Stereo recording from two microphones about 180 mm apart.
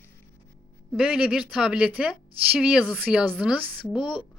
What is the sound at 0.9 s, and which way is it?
Speech, 5° right (ahead or behind).